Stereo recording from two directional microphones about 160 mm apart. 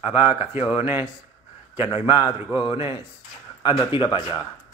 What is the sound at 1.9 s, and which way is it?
Speech, 15° right (ahead or behind).